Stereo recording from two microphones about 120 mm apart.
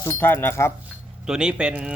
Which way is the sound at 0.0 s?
20° left (ahead or behind).